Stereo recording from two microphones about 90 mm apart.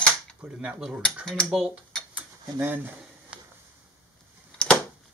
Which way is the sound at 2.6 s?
20° right (ahead or behind).